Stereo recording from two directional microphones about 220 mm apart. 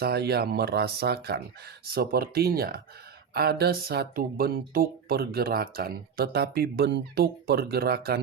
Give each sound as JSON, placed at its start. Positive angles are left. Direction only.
{"t": 0.0, "sound": "speech", "side_deg": -45}